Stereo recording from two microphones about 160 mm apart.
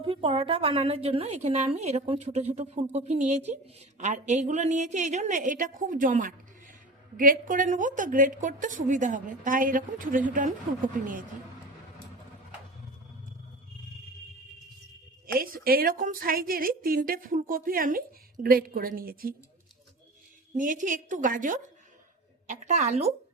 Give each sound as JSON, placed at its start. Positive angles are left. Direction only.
{"t": 0.0, "sound": "a woman's voice", "side_deg": -35}
{"t": 15.4, "sound": "a woman's voice", "side_deg": -65}
{"t": 20.6, "sound": "a woman's voice", "side_deg": -55}